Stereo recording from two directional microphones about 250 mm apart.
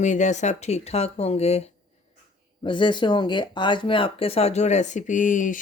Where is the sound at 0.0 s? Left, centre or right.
Left.